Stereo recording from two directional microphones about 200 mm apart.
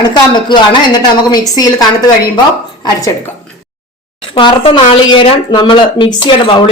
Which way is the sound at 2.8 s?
15° left (ahead or behind).